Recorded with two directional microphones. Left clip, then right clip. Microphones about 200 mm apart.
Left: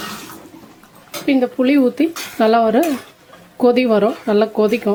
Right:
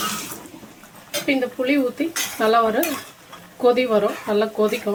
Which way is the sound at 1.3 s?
45° left (ahead or behind).